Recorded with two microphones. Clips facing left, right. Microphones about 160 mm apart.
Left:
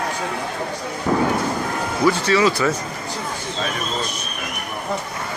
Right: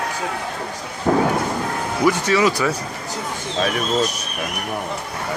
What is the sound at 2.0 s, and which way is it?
Speech, 15° right (ahead or behind).